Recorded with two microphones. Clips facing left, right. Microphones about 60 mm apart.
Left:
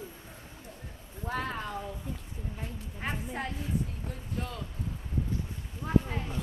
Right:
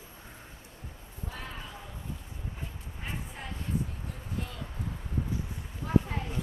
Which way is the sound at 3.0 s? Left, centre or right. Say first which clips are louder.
Left 6 dB; left.